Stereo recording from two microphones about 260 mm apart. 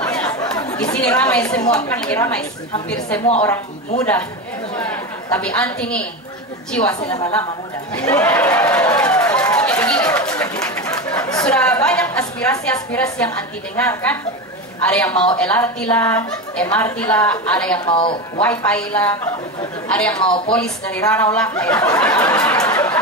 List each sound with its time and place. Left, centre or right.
0.0 s chatter: centre
0.9 s a woman's voice: centre
4.7 s a woman's voice: centre
8.0 s a sound: centre
11.4 s a woman's voice: centre
17.8 s speech: centre
18.4 s a woman's voice: centre
20.2 s speech: centre
20.5 s a woman's voice: centre